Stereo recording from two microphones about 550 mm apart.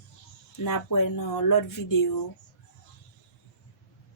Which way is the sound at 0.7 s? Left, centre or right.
Left.